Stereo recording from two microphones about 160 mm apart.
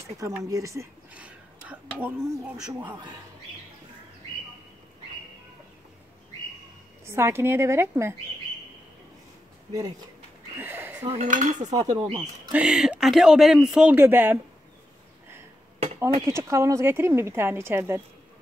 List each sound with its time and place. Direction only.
0.2 s speech: 20° right (ahead or behind)
1.1 s speech: 10° right (ahead or behind)
7.1 s a woman's voice: 15° right (ahead or behind)
9.7 s speech: 20° right (ahead or behind)
10.6 s a sound: 15° right (ahead or behind)
11.1 s dishes: 50° right (ahead or behind)
11.6 s speech: 25° right (ahead or behind)
12.5 s speech: 5° right (ahead or behind)
16.2 s a woman's voice: 15° right (ahead or behind)